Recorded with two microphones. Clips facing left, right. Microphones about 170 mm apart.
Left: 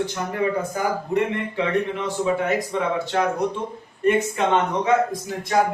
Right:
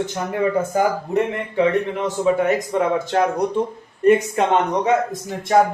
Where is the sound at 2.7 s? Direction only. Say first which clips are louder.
Right 4 dB; 45° right (ahead or behind).